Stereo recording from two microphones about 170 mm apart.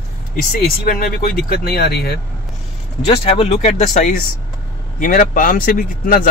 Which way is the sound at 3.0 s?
35° left (ahead or behind).